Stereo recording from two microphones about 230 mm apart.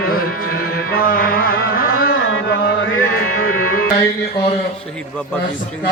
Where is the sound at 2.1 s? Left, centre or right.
Left.